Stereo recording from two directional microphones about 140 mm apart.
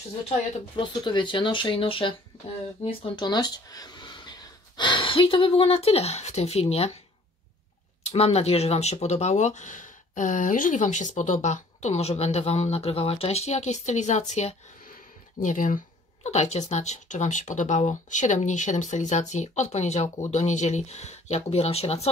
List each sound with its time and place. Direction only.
0.7 s speech: 35° left (ahead or behind)
8.0 s speech: 50° left (ahead or behind)
15.4 s speech: 70° left (ahead or behind)
16.3 s speech: 50° left (ahead or behind)